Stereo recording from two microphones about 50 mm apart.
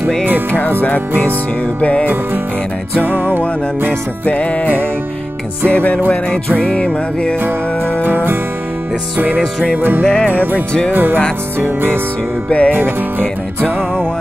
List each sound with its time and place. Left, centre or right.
0.0 s music: centre
1.8 s music: left
3.3 s music: right
4.3 s music: left
6.6 s music: centre
8.0 s music: right
9.4 s music: centre
9.8 s music: right
10.0 s music: centre
10.3 s music: right
12.4 s music: left